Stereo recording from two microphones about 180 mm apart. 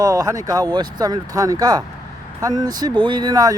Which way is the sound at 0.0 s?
20° right (ahead or behind).